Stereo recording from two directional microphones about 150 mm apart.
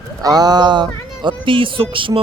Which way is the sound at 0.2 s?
25° right (ahead or behind).